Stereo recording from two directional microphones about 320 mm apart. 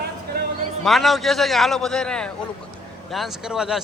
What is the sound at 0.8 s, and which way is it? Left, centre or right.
Speech, centre.